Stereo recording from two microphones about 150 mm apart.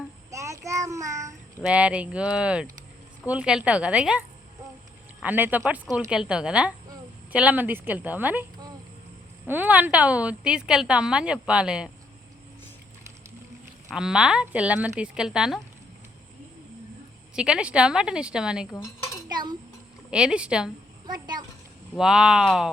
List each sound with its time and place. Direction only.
0.3 s child singing: 20° right (ahead or behind)
1.6 s a woman's voice: 5° right (ahead or behind)
5.2 s a woman's voice: 10° right (ahead or behind)
9.5 s a woman's voice: 10° right (ahead or behind)
13.9 s speech: 5° right (ahead or behind)
17.3 s speech: 5° right (ahead or behind)
18.7 s cutlery: 20° left (ahead or behind)
19.3 s a sound: 30° right (ahead or behind)
20.1 s speech: 5° right (ahead or behind)
21.9 s speech: 5° right (ahead or behind)